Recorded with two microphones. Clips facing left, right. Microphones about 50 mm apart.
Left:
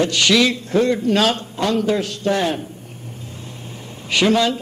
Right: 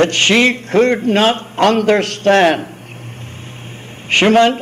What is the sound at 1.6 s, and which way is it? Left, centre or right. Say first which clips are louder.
A man's voice: right 9 dB; right.